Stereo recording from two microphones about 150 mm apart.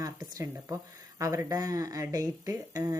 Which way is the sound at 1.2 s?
20° right (ahead or behind).